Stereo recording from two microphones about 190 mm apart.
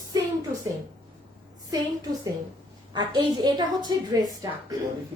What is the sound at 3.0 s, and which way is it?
Speech, 20° right (ahead or behind).